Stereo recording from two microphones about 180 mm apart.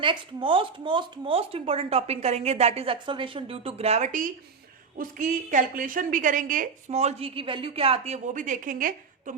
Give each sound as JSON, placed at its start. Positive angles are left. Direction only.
{"t": 0.0, "sound": "a woman's voice", "side_deg": -25}